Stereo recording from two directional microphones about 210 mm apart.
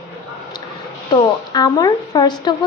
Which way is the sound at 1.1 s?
20° left (ahead or behind).